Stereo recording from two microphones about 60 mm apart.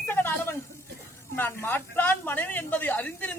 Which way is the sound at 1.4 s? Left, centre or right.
Left.